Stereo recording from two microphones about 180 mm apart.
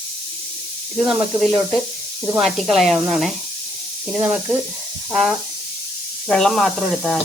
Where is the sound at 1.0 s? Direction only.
5° right (ahead or behind).